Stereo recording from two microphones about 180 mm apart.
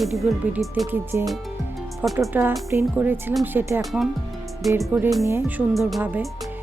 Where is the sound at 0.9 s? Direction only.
10° right (ahead or behind).